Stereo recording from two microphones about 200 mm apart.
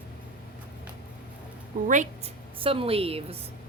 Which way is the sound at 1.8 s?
40° right (ahead or behind).